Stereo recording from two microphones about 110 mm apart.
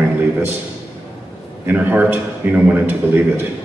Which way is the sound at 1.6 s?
15° right (ahead or behind).